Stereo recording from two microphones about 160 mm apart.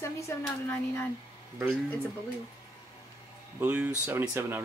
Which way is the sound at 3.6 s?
10° right (ahead or behind).